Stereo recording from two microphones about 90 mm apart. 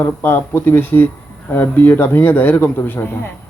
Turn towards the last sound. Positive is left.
turn(degrees=20)  # may be behind; listen again after turning